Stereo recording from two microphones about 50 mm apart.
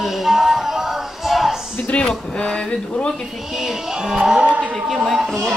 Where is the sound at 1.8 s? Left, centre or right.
Left.